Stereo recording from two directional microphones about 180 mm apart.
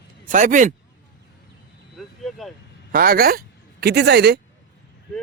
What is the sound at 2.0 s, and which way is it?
Vehicle, centre (ahead or behind).